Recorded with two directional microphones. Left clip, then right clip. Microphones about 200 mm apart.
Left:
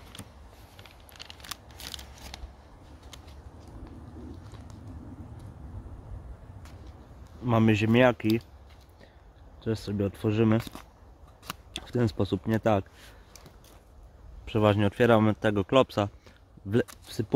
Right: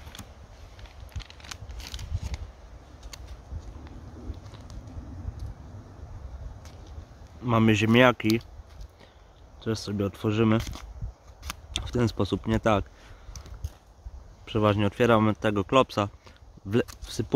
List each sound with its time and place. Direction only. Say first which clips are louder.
1.1 s a sound: left 1 dB; 50° left (ahead or behind)
7.4 s speech: right 2 dB; 5° right (ahead or behind)
9.6 s speech: right 1 dB; centre (ahead or behind)
14.4 s speech: even; centre (ahead or behind)